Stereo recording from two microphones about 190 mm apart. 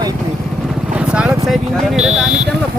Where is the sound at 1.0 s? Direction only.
5° right (ahead or behind).